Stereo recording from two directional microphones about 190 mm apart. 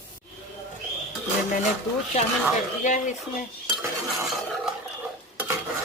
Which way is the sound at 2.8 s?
40° left (ahead or behind).